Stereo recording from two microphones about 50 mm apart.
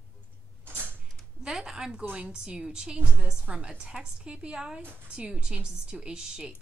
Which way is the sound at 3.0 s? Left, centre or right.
Right.